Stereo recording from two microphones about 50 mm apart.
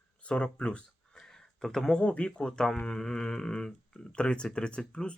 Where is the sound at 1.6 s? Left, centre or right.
Centre.